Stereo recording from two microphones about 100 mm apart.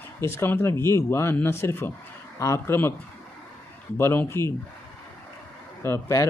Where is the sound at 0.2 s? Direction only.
25° left (ahead or behind).